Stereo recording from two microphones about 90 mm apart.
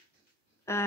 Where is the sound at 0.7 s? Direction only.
30° left (ahead or behind).